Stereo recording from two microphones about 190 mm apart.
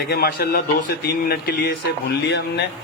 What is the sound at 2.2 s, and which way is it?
Speech, 65° left (ahead or behind).